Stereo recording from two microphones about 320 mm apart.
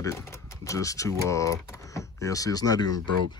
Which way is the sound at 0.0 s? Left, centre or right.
Centre.